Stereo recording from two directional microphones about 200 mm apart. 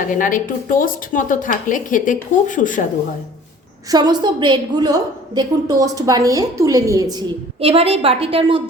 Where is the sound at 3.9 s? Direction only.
20° right (ahead or behind).